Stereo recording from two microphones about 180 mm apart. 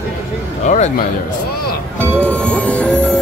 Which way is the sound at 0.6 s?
40° left (ahead or behind).